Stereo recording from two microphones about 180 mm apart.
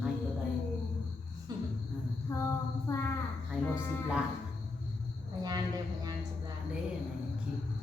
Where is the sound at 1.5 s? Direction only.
20° right (ahead or behind).